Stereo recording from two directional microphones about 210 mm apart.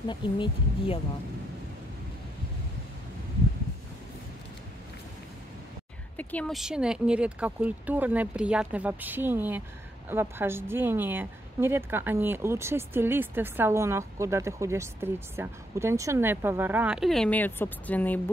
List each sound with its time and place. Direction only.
0.1 s speech: 20° left (ahead or behind)
6.1 s speech: 5° left (ahead or behind)